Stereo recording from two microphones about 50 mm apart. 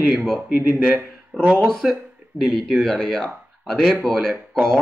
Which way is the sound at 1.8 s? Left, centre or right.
Centre.